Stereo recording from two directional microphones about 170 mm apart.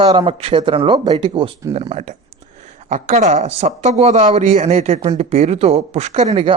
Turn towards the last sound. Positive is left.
turn(degrees=-35)  # may be behind; listen again after turning